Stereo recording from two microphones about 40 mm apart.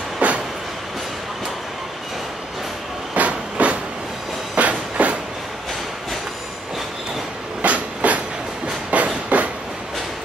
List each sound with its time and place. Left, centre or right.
0.2 s train: right
3.2 s train: right
7.6 s train: right
8.9 s a sound: right
9.3 s train: right